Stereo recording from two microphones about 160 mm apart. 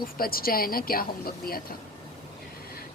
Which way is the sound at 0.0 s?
65° left (ahead or behind).